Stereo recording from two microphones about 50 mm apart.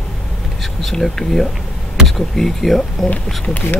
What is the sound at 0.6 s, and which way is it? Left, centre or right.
Speech, centre.